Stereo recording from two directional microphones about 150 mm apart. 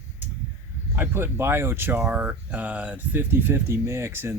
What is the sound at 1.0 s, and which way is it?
Speech, 15° right (ahead or behind).